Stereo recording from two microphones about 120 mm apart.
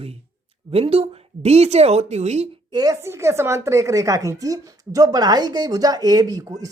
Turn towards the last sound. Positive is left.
turn(degrees=-30)  # may be behind; listen again after turning